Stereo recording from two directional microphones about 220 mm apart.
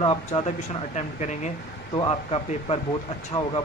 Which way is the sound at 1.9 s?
20° left (ahead or behind).